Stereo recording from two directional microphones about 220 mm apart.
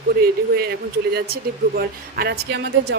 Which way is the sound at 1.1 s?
45° right (ahead or behind).